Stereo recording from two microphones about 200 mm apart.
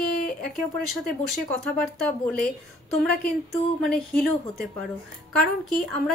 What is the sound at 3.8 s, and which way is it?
Speech, 90° right.